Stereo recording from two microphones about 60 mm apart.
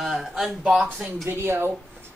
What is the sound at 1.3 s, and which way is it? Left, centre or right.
Speech, right.